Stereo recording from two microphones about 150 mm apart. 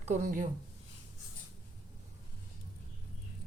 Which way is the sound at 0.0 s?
60° right (ahead or behind).